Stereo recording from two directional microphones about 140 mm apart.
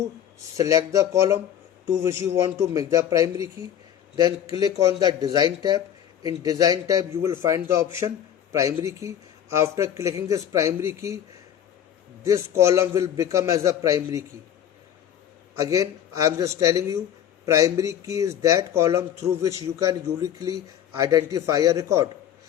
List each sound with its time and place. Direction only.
0.5 s speech: 25° right (ahead or behind)
12.2 s speech: 20° right (ahead or behind)
15.5 s speech: 25° right (ahead or behind)